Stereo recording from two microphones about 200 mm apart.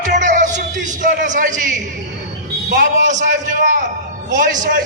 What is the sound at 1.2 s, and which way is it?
Speech, 40° right (ahead or behind).